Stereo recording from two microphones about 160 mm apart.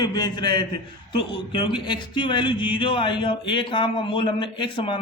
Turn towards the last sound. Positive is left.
turn(degrees=30)  # may be behind; listen again after turning